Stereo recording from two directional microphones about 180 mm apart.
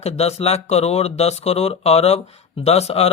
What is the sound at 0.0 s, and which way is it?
Speech, 35° left (ahead or behind).